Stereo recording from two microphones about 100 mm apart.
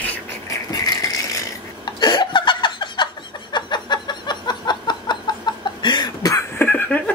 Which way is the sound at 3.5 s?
50° left (ahead or behind).